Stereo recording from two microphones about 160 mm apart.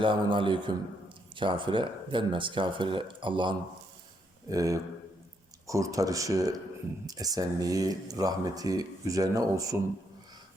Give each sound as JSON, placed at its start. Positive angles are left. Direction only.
{"t": 0.0, "sound": "speech", "side_deg": -30}